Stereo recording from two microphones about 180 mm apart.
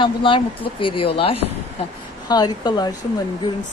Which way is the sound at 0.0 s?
30° left (ahead or behind).